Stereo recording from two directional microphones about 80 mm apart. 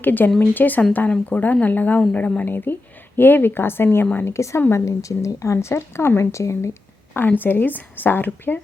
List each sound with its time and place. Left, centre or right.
0.0 s a woman's voice: left
7.1 s speech: left